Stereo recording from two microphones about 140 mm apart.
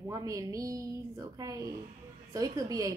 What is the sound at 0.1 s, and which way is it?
Speech, 25° right (ahead or behind).